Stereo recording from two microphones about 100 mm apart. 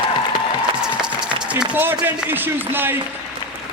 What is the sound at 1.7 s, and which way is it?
A man's voice, 20° right (ahead or behind).